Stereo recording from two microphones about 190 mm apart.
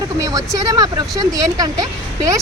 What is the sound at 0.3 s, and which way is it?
Speech, 20° right (ahead or behind).